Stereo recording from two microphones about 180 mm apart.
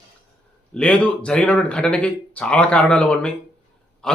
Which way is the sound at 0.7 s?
5° left (ahead or behind).